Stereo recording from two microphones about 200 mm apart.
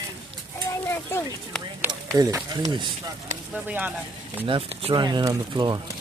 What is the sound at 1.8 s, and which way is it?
Speech, 15° right (ahead or behind).